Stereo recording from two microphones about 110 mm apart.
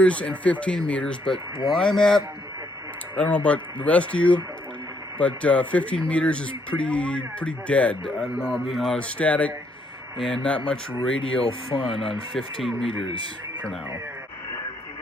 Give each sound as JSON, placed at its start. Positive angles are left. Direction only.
{"t": 0.0, "sound": "a man's voice", "side_deg": 10}
{"t": 8.1, "sound": "a man's voice", "side_deg": -5}
{"t": 12.9, "sound": "speech", "side_deg": 55}